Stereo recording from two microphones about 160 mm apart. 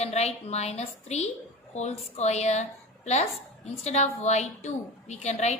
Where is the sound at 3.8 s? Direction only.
45° left (ahead or behind).